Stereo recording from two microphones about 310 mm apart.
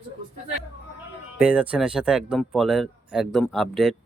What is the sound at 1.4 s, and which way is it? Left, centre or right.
Speech, centre.